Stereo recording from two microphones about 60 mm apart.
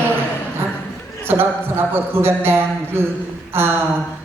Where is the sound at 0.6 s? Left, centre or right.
Right.